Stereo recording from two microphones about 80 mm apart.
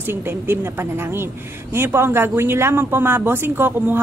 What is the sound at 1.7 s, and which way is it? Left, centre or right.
Speech, right.